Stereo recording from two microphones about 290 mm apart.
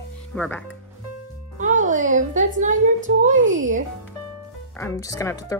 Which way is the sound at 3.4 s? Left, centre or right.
Right.